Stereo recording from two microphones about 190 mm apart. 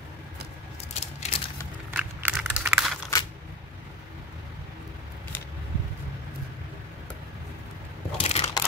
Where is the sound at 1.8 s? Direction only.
5° right (ahead or behind).